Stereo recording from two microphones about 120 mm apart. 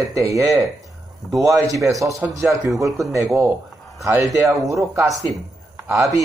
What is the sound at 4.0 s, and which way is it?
Speech, 25° right (ahead or behind).